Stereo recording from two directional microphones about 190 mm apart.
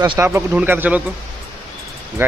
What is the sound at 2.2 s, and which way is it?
Speech, 15° right (ahead or behind).